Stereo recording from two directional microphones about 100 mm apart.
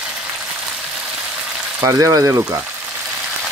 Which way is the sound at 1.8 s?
30° right (ahead or behind).